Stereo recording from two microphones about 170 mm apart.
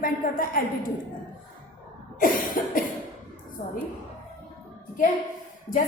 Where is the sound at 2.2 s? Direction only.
55° left (ahead or behind).